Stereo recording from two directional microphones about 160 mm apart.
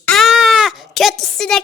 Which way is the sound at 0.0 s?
Centre (ahead or behind).